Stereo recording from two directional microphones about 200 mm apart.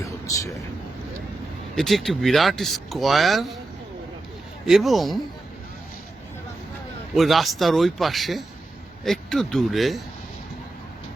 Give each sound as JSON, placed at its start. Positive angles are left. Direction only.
{"t": 0.0, "sound": "vehicle", "side_deg": 15}
{"t": 1.7, "sound": "speech", "side_deg": 0}
{"t": 4.6, "sound": "speech", "side_deg": 0}
{"t": 7.2, "sound": "speech", "side_deg": 0}